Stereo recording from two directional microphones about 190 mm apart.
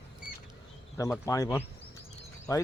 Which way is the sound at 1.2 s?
15° left (ahead or behind).